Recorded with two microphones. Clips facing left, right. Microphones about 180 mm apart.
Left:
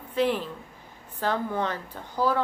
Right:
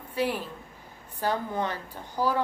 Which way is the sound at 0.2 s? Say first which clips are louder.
Left 4 dB; 10° right (ahead or behind).